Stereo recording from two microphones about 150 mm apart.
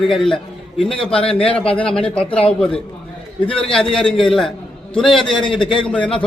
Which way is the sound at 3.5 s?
35° left (ahead or behind).